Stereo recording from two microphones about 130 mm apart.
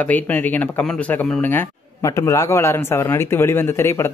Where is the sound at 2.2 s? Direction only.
25° left (ahead or behind).